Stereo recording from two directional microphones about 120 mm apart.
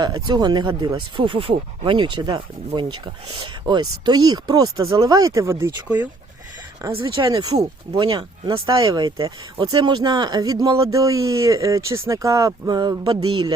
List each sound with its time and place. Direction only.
0.0 s speech: 35° right (ahead or behind)
6.9 s speech: 40° right (ahead or behind)